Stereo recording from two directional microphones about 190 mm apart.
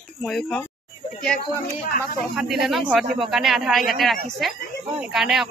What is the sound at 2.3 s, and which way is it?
Speech, centre (ahead or behind).